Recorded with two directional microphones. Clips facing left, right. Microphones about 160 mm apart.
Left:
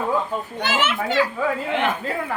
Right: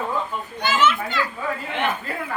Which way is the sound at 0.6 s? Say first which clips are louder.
Right 3 dB; 85° left.